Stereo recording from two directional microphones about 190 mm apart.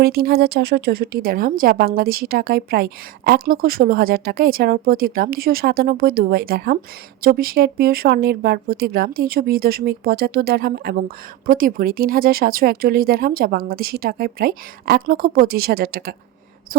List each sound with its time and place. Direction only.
0.0 s speech: 55° right (ahead or behind)